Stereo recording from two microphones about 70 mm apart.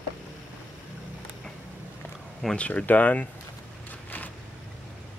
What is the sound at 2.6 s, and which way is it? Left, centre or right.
Speech, centre.